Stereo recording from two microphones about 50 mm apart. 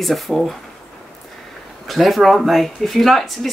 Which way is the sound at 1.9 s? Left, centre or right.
Centre.